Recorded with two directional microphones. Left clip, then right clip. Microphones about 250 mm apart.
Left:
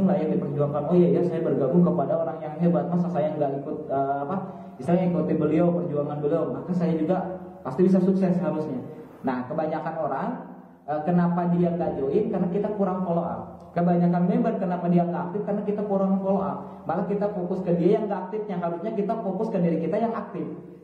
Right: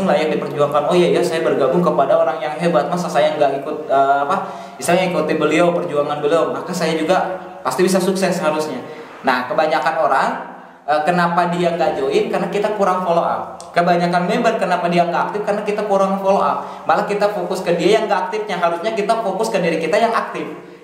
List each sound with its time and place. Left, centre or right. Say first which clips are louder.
0.0 s a man's voice: right 9 dB; centre
19.2 s speech: right 9 dB; right
19.5 s a man's voice: right 9 dB; centre